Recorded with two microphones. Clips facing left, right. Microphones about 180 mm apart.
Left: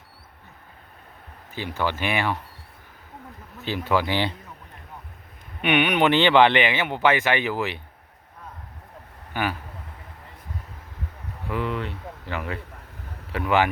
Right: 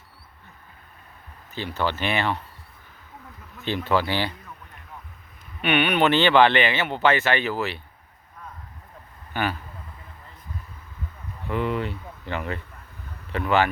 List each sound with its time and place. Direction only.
1.5 s speech: 15° left (ahead or behind)
3.6 s speech: 10° left (ahead or behind)
5.6 s speech: 15° left (ahead or behind)
9.3 s speech: 10° left (ahead or behind)
11.4 s speech: centre (ahead or behind)